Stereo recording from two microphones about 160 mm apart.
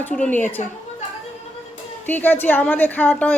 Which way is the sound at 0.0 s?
10° left (ahead or behind).